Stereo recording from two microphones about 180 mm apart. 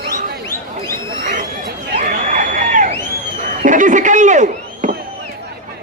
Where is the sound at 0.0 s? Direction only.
60° right (ahead or behind).